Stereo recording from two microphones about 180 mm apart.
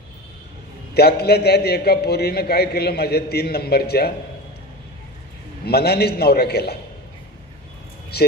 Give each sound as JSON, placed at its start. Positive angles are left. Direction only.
{"t": 0.9, "sound": "a man's voice", "side_deg": 60}
{"t": 5.7, "sound": "a man's voice", "side_deg": 60}
{"t": 8.1, "sound": "a man's voice", "side_deg": 65}